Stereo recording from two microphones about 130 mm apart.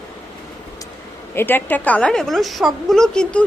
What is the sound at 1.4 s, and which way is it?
A woman's voice, 15° left (ahead or behind).